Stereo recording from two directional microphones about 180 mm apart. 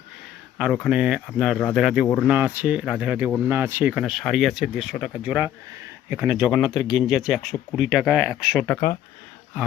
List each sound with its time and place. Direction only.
0.6 s speech: 5° right (ahead or behind)
6.7 s speech: 20° left (ahead or behind)
6.9 s speech: centre (ahead or behind)